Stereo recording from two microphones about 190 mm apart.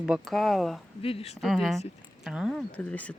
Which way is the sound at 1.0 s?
30° left (ahead or behind).